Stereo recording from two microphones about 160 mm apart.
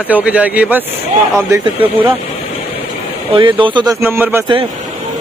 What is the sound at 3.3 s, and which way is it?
Speech, 30° right (ahead or behind).